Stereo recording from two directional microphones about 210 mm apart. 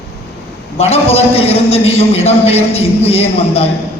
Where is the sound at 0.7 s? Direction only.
30° left (ahead or behind).